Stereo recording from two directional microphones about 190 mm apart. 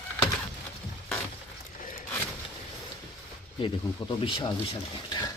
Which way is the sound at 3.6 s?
25° left (ahead or behind).